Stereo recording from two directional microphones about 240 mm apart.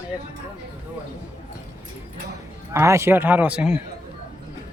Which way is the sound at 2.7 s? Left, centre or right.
Centre.